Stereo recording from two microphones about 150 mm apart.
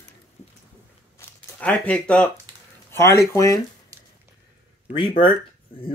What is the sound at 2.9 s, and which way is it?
Speech, 15° left (ahead or behind).